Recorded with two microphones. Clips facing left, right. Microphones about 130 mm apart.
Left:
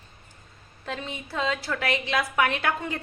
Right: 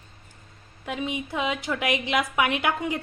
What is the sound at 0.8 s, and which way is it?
A woman's voice, 15° right (ahead or behind).